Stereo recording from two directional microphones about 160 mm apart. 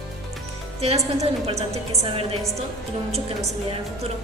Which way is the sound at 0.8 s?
40° right (ahead or behind).